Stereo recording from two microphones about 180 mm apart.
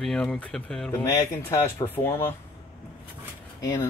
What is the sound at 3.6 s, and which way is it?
Speech, 15° left (ahead or behind).